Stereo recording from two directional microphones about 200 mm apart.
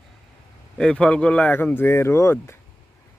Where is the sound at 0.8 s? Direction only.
5° left (ahead or behind).